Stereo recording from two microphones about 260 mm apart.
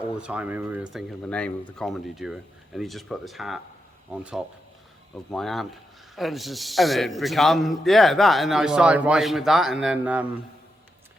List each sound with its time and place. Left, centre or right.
0.2 s a man's voice: centre